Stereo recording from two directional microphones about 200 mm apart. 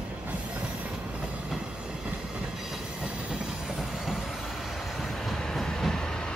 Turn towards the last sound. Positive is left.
turn(degrees=0)  # may be behind; listen again after turning